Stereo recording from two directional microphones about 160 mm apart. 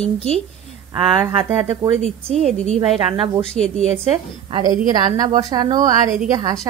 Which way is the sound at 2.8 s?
30° right (ahead or behind).